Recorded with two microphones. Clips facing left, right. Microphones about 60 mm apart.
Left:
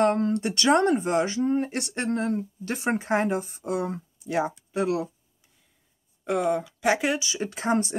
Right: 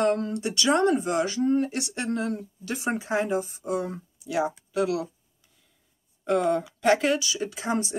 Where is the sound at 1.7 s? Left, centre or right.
Left.